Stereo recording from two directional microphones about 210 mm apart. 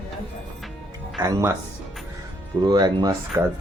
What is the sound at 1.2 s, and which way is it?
Speech, 15° right (ahead or behind).